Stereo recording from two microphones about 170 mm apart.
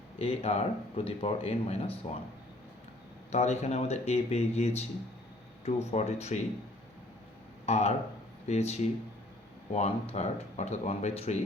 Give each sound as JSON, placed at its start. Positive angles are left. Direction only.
{"t": 0.2, "sound": "speech", "side_deg": 35}
{"t": 3.3, "sound": "speech", "side_deg": 40}
{"t": 7.6, "sound": "speech", "side_deg": 40}